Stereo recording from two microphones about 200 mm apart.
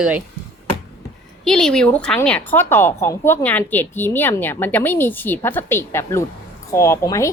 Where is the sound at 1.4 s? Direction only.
5° left (ahead or behind).